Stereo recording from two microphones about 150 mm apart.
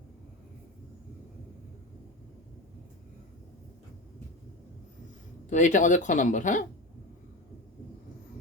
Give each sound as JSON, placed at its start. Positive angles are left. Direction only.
{"t": 5.5, "sound": "speech", "side_deg": 55}